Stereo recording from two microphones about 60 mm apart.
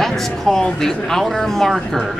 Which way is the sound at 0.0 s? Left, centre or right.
Centre.